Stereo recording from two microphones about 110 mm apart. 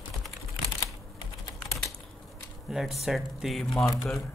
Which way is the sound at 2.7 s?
Centre (ahead or behind).